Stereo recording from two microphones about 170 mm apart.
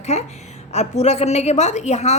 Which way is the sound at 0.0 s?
40° left (ahead or behind).